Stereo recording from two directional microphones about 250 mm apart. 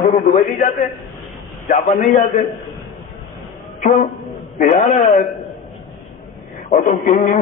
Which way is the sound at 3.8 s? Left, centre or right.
Left.